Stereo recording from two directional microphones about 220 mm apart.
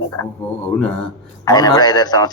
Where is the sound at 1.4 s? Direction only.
20° left (ahead or behind).